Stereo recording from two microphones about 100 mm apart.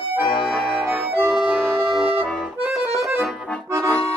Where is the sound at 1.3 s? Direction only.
5° right (ahead or behind).